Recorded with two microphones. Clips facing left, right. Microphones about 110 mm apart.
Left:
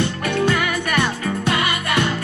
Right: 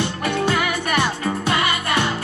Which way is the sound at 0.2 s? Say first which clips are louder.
Even; 30° right (ahead or behind).